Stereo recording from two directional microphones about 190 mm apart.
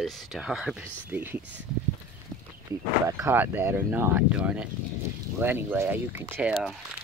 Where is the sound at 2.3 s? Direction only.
5° left (ahead or behind).